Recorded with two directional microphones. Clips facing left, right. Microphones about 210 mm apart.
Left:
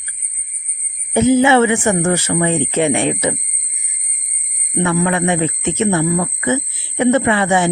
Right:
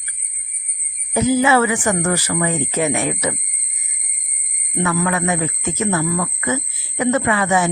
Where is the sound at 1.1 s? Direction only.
25° left (ahead or behind).